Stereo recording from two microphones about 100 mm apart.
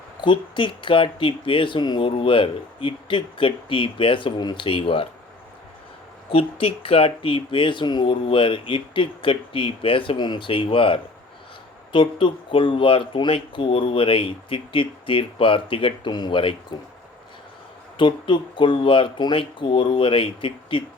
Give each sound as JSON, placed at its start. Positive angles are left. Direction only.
{"t": 0.2, "sound": "speech", "side_deg": 55}
{"t": 4.6, "sound": "speech", "side_deg": 65}
{"t": 6.3, "sound": "speech", "side_deg": 70}
{"t": 17.9, "sound": "speech", "side_deg": 55}